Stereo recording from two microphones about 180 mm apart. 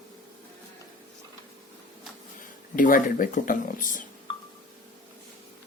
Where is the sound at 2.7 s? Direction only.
50° left (ahead or behind).